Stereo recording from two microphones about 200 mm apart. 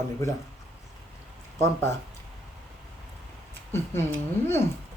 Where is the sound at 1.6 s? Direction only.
15° left (ahead or behind).